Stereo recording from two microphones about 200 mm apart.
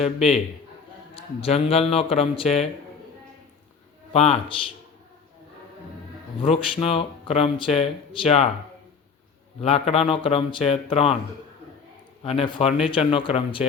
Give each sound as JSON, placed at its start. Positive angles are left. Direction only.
{"t": 0.0, "sound": "a man's voice", "side_deg": 30}
{"t": 4.1, "sound": "a man's voice", "side_deg": 30}
{"t": 6.4, "sound": "speech", "side_deg": 30}
{"t": 9.6, "sound": "speech", "side_deg": 30}
{"t": 12.2, "sound": "speech", "side_deg": 30}